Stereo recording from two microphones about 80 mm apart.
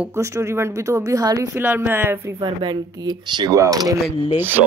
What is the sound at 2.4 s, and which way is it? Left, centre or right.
Speech, right.